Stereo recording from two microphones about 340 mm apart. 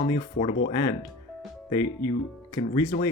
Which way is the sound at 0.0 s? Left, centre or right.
Left.